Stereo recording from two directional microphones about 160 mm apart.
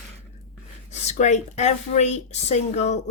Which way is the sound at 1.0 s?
45° left (ahead or behind).